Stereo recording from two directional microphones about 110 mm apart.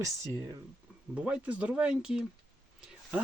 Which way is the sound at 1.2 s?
10° right (ahead or behind).